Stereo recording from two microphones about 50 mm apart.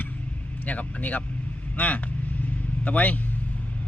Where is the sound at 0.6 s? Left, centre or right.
Left.